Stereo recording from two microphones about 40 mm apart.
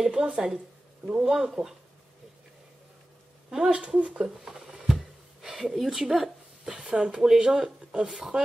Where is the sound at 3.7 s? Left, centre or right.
Right.